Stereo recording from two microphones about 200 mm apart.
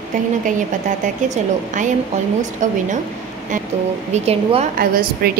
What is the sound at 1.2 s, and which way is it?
A woman's voice, 40° right (ahead or behind).